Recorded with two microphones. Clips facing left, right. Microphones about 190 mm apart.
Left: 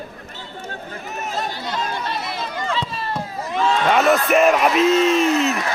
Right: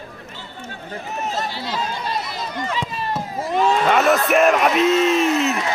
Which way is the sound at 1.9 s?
60° left (ahead or behind).